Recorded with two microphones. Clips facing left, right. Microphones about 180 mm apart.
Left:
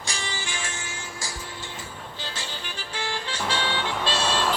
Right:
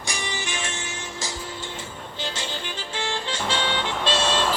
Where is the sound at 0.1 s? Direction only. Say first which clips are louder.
Right 3 dB; 15° right (ahead or behind).